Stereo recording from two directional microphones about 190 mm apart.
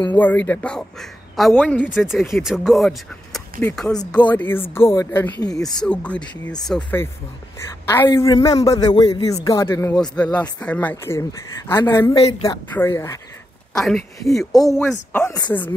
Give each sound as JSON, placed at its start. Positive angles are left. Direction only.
{"t": 0.1, "sound": "a man's voice", "side_deg": 10}
{"t": 13.7, "sound": "speech", "side_deg": 0}
{"t": 14.5, "sound": "speech", "side_deg": 20}